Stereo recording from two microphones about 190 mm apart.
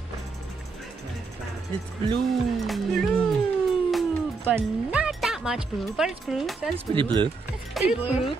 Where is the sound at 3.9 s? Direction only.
Centre (ahead or behind).